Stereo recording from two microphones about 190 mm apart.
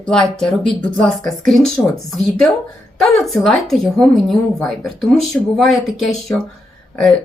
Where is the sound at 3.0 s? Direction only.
Centre (ahead or behind).